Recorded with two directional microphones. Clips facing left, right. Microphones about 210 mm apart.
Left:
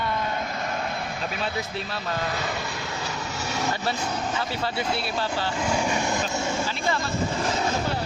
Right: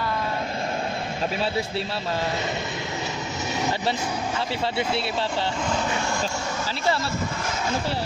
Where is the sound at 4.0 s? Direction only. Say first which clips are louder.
Right 1 dB; 10° right (ahead or behind).